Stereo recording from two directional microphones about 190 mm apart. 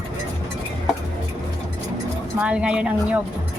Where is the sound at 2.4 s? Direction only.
5° right (ahead or behind).